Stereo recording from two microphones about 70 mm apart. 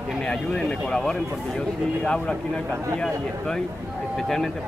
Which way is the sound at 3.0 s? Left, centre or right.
Centre.